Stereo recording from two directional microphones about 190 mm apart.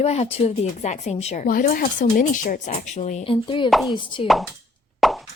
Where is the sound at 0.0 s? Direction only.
35° left (ahead or behind).